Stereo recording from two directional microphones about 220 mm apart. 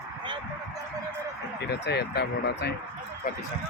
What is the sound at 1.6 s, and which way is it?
Speech, 50° left (ahead or behind).